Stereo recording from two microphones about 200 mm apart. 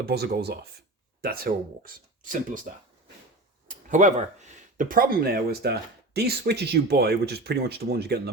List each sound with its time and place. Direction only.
0.0 s speech: 55° right (ahead or behind)
3.8 s speech: 40° right (ahead or behind)